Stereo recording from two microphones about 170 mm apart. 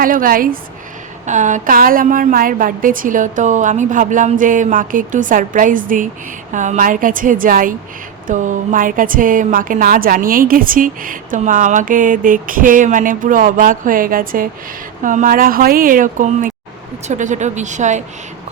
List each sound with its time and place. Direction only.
0.0 s speech: 55° right (ahead or behind)
1.3 s a woman's voice: 45° right (ahead or behind)